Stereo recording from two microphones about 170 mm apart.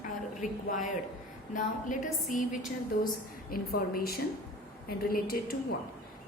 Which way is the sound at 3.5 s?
60° left (ahead or behind).